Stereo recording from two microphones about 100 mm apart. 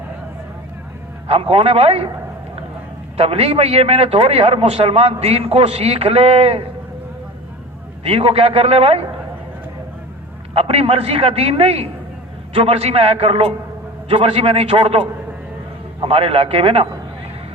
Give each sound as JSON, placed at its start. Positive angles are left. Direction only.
{"t": 1.3, "sound": "a man's voice", "side_deg": -75}
{"t": 3.2, "sound": "a man's voice", "side_deg": -85}
{"t": 8.0, "sound": "a man's voice", "side_deg": -80}
{"t": 10.5, "sound": "a man's voice", "side_deg": -90}
{"t": 16.0, "sound": "a man's voice", "side_deg": -80}